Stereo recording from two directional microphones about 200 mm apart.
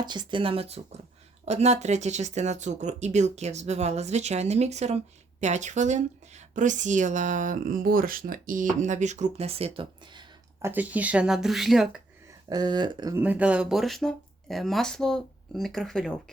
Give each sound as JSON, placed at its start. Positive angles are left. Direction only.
{"t": 0.0, "sound": "a woman's voice", "side_deg": -20}
{"t": 10.7, "sound": "speech", "side_deg": -10}
{"t": 12.5, "sound": "speech", "side_deg": -20}